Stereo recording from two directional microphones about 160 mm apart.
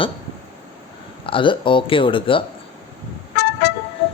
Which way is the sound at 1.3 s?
30° left (ahead or behind).